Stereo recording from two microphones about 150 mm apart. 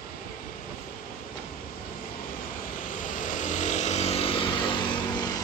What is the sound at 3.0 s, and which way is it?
Vehicle, 60° left (ahead or behind).